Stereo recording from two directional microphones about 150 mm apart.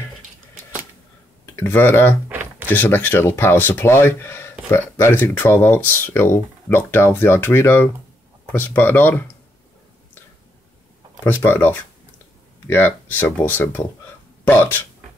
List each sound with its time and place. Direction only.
1.4 s speech: 15° left (ahead or behind)
11.2 s speech: 15° left (ahead or behind)